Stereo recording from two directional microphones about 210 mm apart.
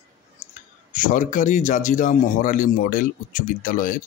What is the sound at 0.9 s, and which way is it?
Speech, 40° left (ahead or behind).